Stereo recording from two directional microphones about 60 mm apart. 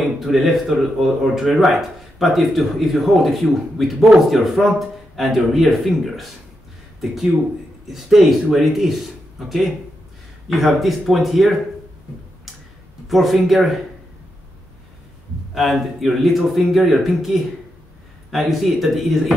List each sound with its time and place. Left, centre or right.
0.2 s speech: centre
7.9 s speech: centre
10.5 s speech: centre
13.1 s speech: centre
15.5 s speech: centre